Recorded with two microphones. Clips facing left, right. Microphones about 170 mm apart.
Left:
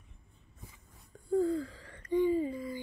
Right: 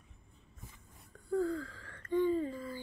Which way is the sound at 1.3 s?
15° left (ahead or behind).